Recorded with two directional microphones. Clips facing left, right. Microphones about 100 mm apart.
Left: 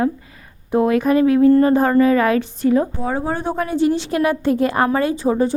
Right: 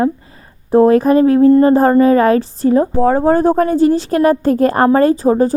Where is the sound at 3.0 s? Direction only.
45° right (ahead or behind).